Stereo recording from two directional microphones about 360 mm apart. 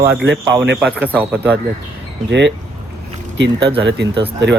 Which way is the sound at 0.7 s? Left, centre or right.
Centre.